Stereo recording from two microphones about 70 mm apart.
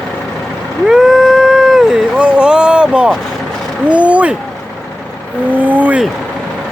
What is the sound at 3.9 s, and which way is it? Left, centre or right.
Speech, centre.